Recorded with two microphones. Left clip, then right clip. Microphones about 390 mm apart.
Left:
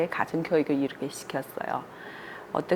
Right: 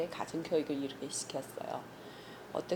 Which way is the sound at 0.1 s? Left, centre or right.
Left.